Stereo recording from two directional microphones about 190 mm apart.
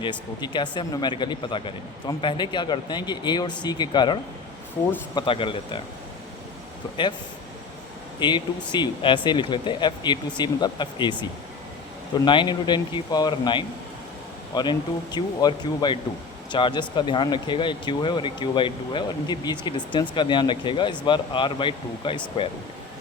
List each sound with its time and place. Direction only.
0.0 s speech: 25° left (ahead or behind)
8.2 s speech: 25° left (ahead or behind)
12.2 s speech: 25° left (ahead or behind)